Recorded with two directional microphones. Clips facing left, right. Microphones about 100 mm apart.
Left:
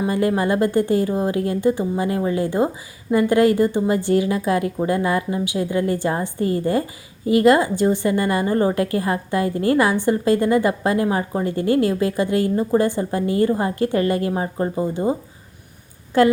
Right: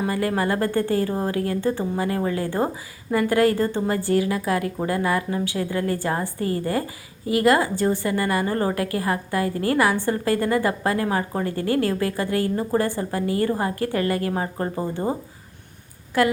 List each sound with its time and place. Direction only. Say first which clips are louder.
0.0 s a woman's voice: left 3 dB; 20° left (ahead or behind)
16.1 s a woman's voice: left 5 dB; 30° left (ahead or behind)